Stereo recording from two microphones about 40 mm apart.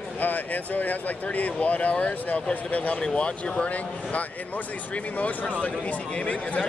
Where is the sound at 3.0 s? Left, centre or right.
Left.